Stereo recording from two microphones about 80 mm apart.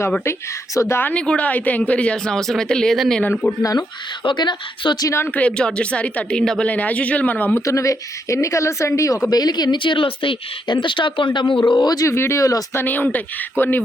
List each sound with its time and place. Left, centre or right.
0.3 s speech: left
1.1 s speech: centre
3.6 s speech: left
4.2 s a woman's voice: left
5.2 s speech: centre
7.6 s speech: left
9.3 s speech: left
11.7 s speech: left
12.0 s speech: left
12.7 s speech: left